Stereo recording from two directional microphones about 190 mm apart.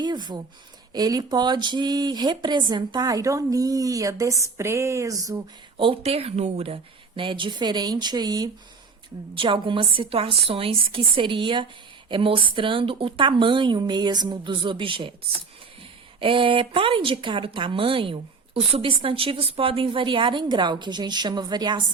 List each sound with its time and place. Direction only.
0.0 s speech: 20° right (ahead or behind)
16.2 s speech: 25° right (ahead or behind)